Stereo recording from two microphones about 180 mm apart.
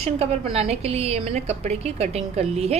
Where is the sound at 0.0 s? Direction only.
35° right (ahead or behind).